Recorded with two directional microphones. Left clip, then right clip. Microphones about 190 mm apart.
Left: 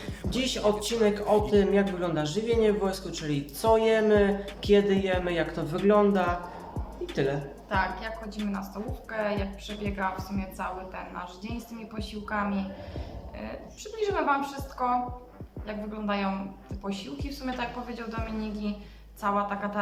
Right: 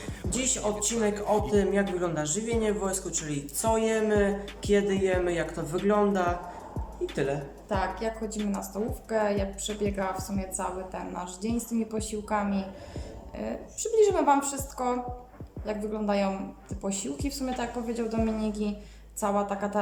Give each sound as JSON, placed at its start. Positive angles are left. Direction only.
{"t": 0.0, "sound": "speech", "side_deg": 0}
{"t": 7.7, "sound": "a woman's voice", "side_deg": -25}
{"t": 13.9, "sound": "a woman's voice", "side_deg": -25}
{"t": 19.2, "sound": "a woman's voice", "side_deg": -25}